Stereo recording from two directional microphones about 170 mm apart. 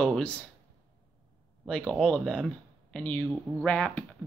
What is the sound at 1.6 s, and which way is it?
Speech, 5° left (ahead or behind).